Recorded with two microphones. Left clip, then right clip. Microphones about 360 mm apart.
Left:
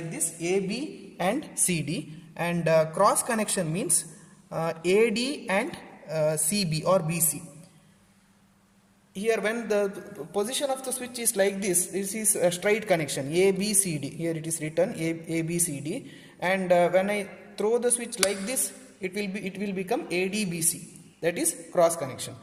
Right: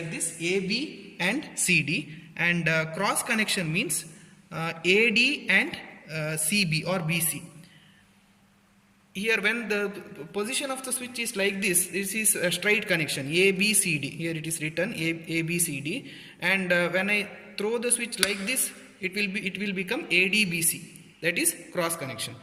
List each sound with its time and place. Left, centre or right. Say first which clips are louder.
0.1 s a man's voice: left 1 dB; centre
9.1 s a man's voice: right 1 dB; left